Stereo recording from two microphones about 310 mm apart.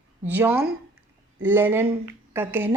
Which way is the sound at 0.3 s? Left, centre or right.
Centre.